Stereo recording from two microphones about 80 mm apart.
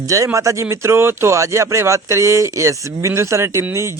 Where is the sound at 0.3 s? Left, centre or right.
Right.